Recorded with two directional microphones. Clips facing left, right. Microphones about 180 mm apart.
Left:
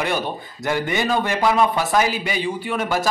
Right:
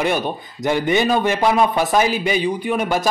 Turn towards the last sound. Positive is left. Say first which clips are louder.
# right 3 dB
turn(degrees=-15)  # may be behind; listen again after turning